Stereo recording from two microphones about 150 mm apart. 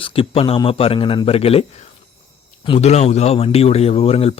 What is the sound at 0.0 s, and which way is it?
Speech, 40° left (ahead or behind).